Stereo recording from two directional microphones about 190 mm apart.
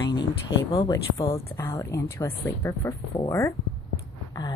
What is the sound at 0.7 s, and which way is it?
Speech, 20° left (ahead or behind).